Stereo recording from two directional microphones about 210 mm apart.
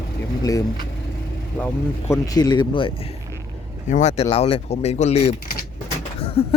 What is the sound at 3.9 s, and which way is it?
Speech, 35° left (ahead or behind).